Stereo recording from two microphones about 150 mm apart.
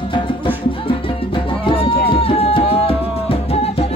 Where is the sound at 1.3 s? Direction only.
35° left (ahead or behind).